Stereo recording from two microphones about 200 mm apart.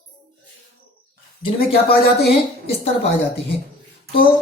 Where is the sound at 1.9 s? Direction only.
50° left (ahead or behind).